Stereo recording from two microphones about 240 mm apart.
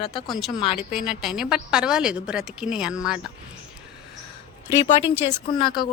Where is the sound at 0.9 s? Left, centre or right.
Centre.